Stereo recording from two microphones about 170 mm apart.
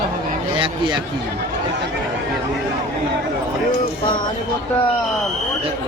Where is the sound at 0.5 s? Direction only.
30° right (ahead or behind).